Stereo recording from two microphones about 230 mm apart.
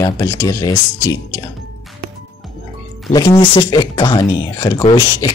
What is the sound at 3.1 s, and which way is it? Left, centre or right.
Speech, centre.